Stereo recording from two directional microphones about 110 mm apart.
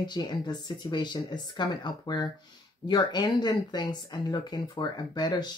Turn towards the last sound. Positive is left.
turn(degrees=40)  # may be behind; listen again after turning